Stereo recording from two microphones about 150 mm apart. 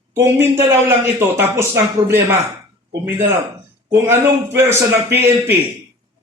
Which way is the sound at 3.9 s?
15° right (ahead or behind).